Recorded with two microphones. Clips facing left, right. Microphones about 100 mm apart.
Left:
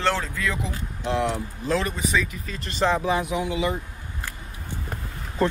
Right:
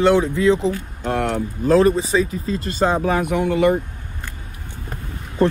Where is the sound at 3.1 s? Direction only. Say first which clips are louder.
Right 6 dB; 55° right (ahead or behind).